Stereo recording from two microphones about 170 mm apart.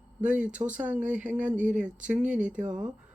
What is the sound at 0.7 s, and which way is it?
Speech, 10° right (ahead or behind).